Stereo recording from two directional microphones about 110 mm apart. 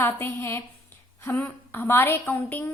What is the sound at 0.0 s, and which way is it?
A woman's voice, 25° left (ahead or behind).